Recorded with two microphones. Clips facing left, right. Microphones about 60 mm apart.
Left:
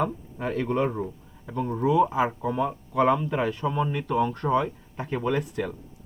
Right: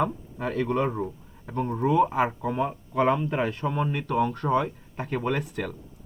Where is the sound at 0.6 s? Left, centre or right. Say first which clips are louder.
Even; right.